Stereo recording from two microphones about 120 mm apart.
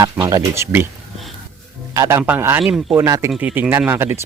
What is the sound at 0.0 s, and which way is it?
Speech, 25° right (ahead or behind).